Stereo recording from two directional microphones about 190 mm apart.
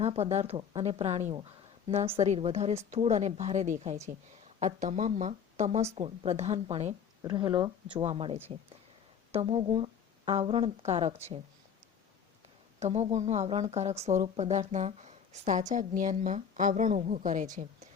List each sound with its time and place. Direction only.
0.0 s speech: 35° right (ahead or behind)
7.2 s speech: 20° right (ahead or behind)
12.8 s speech: 35° right (ahead or behind)